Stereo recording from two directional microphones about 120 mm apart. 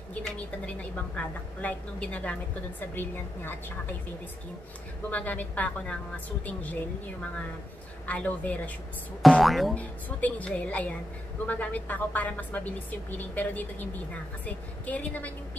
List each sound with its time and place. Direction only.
0.2 s a woman's voice: 10° left (ahead or behind)
5.1 s a woman's voice: 15° left (ahead or behind)
9.2 s speech: centre (ahead or behind)
9.8 s a woman's voice: 10° left (ahead or behind)